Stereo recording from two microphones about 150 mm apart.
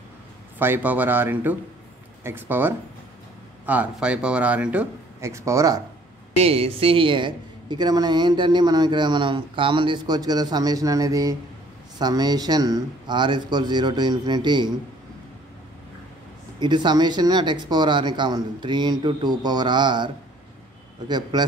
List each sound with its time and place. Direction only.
0.6 s speech: 15° right (ahead or behind)
5.2 s speech: 20° right (ahead or behind)
6.4 s speech: 40° right (ahead or behind)
16.5 s speech: 30° right (ahead or behind)
21.1 s speech: 30° right (ahead or behind)